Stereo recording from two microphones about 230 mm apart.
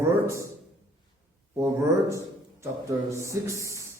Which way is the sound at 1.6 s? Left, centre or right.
Centre.